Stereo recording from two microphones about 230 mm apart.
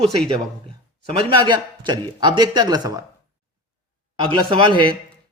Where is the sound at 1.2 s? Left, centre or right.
Centre.